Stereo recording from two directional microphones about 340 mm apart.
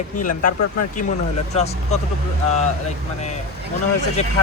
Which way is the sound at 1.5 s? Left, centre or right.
Centre.